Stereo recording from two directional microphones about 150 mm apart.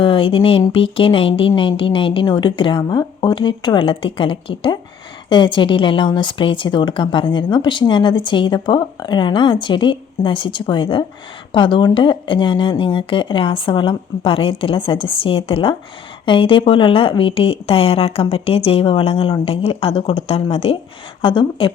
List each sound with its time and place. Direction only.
0.0 s a woman's voice: 35° left (ahead or behind)